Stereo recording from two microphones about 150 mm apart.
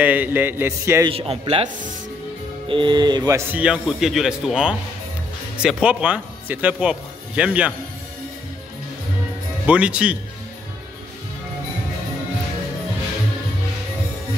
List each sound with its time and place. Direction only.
0.0 s a man's voice: 10° right (ahead or behind)
1.0 s speech: 40° right (ahead or behind)
2.7 s speech: 30° right (ahead or behind)
3.6 s speech: 5° right (ahead or behind)
9.7 s a man's voice: 10° right (ahead or behind)